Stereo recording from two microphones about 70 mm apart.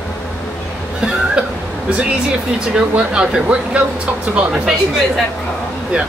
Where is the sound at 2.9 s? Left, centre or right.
Centre.